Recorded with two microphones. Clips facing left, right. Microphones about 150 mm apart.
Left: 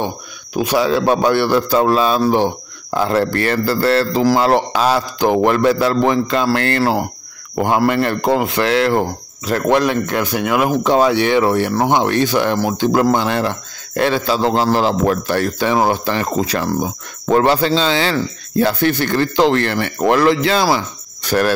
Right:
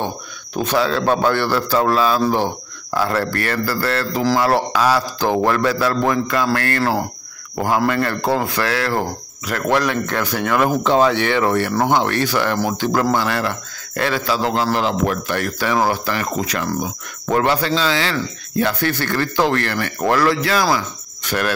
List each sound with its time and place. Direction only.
0.6 s a man's voice: 15° left (ahead or behind); by 18.9 s 30° left (ahead or behind)
18.9 s speech: 20° left (ahead or behind)
20.7 s cricket: 35° left (ahead or behind)